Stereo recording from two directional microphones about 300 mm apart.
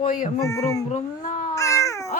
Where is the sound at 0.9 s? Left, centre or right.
Left.